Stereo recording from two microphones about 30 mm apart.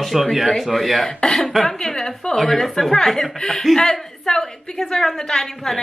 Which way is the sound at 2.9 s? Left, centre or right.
Centre.